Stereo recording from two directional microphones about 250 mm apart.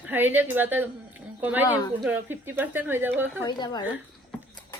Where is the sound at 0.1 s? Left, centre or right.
Centre.